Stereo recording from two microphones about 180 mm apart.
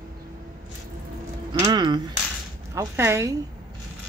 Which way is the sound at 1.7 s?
25° right (ahead or behind).